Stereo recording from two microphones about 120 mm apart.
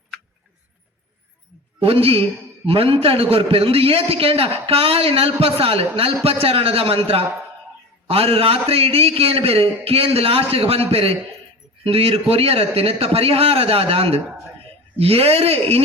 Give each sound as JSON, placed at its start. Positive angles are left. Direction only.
{"t": 1.8, "sound": "a man's voice", "side_deg": -55}